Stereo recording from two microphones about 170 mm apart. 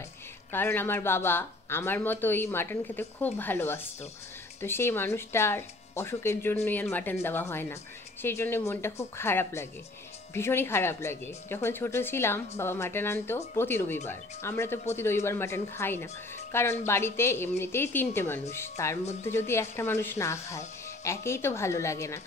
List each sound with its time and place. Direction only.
0.5 s speech: 15° left (ahead or behind)